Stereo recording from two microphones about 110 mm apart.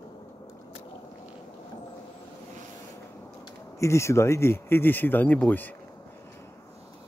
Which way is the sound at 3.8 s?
25° left (ahead or behind).